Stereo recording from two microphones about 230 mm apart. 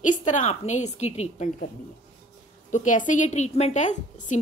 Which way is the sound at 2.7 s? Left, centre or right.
Left.